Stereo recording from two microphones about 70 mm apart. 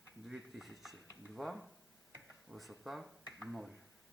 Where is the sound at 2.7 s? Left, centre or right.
Centre.